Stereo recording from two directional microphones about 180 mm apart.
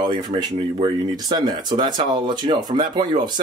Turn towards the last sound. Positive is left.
turn(degrees=-25)  # may be behind; listen again after turning